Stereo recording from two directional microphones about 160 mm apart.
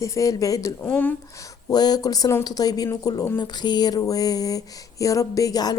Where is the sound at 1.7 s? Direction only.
25° left (ahead or behind).